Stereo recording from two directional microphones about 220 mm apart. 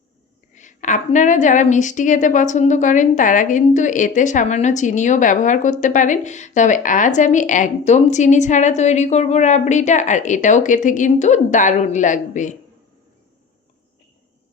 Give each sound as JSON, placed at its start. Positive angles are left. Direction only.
{"t": 0.5, "sound": "a woman's voice", "side_deg": 35}